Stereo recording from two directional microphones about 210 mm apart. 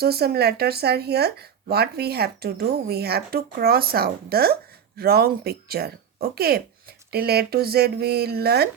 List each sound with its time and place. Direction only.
0.0 s speech: 50° right (ahead or behind)